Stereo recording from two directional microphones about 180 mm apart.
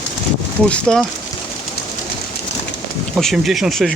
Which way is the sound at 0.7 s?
5° left (ahead or behind).